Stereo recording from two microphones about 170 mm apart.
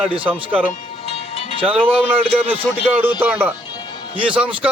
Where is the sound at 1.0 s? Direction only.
35° left (ahead or behind).